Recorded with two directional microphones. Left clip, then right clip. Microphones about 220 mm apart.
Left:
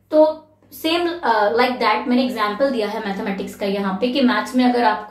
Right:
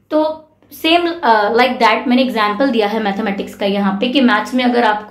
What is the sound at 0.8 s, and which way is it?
A woman's voice, 35° right (ahead or behind).